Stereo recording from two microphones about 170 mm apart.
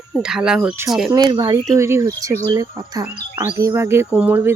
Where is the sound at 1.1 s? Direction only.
25° right (ahead or behind).